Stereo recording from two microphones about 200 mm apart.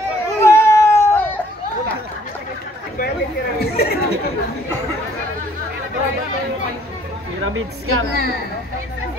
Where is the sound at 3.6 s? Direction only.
50° left (ahead or behind).